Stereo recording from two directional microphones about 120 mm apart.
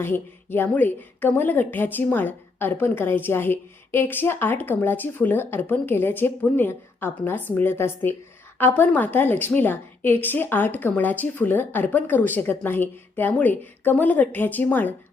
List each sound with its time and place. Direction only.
0.0 s a woman's voice: 20° left (ahead or behind)